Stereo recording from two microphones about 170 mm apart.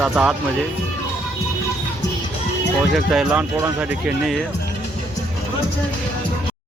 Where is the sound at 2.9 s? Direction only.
5° right (ahead or behind).